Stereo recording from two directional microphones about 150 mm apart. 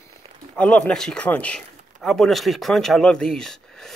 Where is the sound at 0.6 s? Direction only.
10° left (ahead or behind).